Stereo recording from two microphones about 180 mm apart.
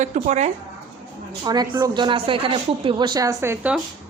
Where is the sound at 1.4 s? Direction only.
20° right (ahead or behind).